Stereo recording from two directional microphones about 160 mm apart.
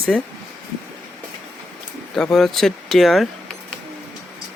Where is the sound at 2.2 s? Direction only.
5° left (ahead or behind).